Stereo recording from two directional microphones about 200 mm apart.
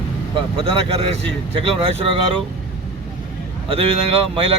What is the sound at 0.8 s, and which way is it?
Speech, 30° right (ahead or behind).